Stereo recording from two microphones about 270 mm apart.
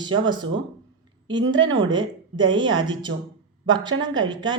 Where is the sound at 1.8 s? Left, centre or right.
Centre.